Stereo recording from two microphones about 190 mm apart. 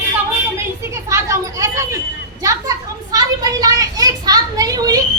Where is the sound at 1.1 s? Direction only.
15° right (ahead or behind).